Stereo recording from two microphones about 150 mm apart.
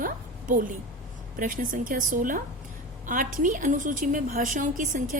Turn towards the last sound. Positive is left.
turn(degrees=-60)  # may be behind; listen again after turning